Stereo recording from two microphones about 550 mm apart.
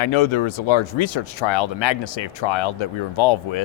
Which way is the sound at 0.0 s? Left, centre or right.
Left.